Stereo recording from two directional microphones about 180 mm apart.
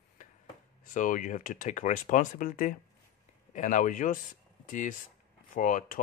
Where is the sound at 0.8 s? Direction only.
45° left (ahead or behind).